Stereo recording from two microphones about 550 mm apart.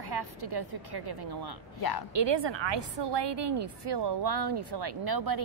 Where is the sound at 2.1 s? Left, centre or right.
Right.